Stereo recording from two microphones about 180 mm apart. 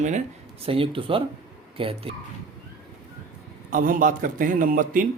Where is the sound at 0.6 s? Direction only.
30° right (ahead or behind).